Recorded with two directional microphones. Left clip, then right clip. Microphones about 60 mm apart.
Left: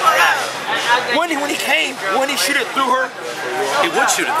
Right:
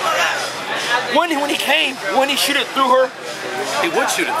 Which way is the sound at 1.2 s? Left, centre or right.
Centre.